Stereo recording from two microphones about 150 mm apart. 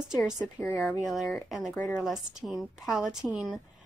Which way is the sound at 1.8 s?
20° left (ahead or behind).